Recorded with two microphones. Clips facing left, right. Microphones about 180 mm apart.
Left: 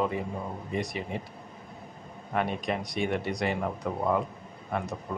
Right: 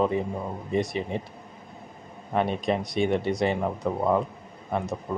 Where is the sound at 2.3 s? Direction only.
30° right (ahead or behind).